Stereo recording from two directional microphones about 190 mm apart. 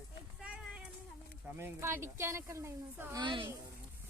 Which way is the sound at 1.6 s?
10° right (ahead or behind).